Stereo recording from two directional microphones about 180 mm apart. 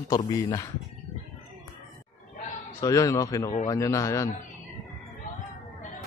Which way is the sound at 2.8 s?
20° left (ahead or behind).